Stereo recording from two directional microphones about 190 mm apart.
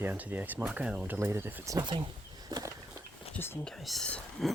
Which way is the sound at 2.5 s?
20° right (ahead or behind).